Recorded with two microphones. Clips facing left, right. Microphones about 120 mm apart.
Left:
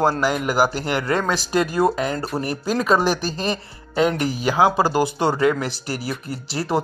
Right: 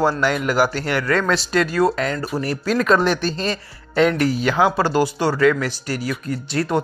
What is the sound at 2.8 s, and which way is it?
A woman's voice, 5° left (ahead or behind).